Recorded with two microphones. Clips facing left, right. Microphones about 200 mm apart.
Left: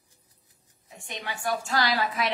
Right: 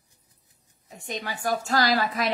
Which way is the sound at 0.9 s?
40° right (ahead or behind).